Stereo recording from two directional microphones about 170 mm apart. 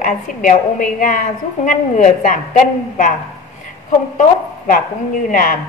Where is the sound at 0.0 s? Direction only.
50° left (ahead or behind).